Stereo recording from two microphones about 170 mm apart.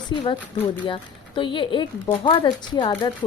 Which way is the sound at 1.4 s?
30° left (ahead or behind).